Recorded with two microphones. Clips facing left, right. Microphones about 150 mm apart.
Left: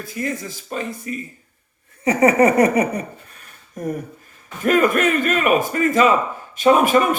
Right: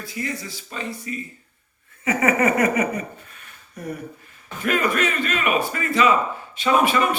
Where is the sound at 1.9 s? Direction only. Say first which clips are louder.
Left 5 dB; 35° left (ahead or behind).